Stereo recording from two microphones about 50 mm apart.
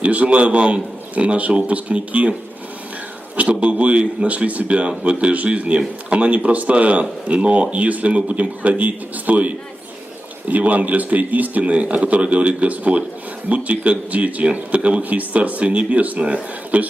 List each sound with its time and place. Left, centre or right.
0.0 s speech: right
3.3 s speech: right